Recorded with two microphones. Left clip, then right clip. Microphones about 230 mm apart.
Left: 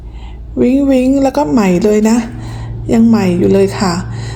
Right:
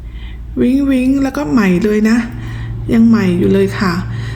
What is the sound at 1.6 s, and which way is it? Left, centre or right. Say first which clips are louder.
Speech: left 3 dB; centre.